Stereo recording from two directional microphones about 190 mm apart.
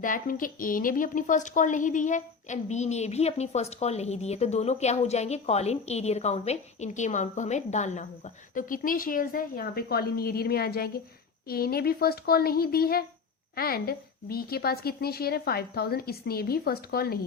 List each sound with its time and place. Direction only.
0.0 s a woman's voice: 45° left (ahead or behind)